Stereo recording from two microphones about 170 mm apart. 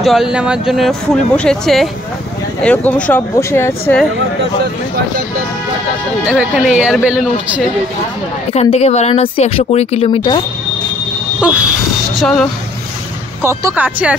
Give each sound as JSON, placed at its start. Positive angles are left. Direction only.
{"t": 0.0, "sound": "speech", "side_deg": 0}
{"t": 6.2, "sound": "a man's voice", "side_deg": -5}
{"t": 8.5, "sound": "speech", "side_deg": 40}
{"t": 12.2, "sound": "speech", "side_deg": 5}
{"t": 13.4, "sound": "a man's voice", "side_deg": -15}